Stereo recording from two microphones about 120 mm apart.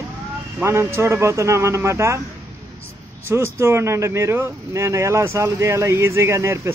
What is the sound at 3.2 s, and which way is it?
Speech, 20° right (ahead or behind).